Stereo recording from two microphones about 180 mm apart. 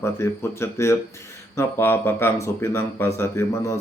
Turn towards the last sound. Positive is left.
turn(degrees=15)  # may be behind; listen again after turning